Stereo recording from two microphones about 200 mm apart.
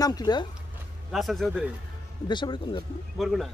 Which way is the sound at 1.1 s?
Centre (ahead or behind).